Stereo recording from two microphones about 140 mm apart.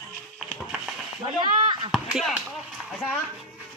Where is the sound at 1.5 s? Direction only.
35° right (ahead or behind).